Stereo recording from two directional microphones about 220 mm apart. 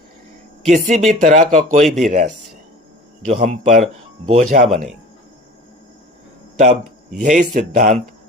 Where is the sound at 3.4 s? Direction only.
35° right (ahead or behind).